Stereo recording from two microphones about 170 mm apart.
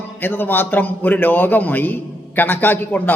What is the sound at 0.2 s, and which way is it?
A man's voice, 10° left (ahead or behind).